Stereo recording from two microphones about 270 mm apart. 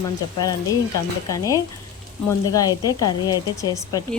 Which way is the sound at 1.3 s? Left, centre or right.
Centre.